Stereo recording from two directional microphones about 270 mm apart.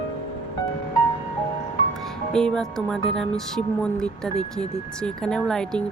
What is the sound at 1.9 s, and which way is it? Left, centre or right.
Speech, centre.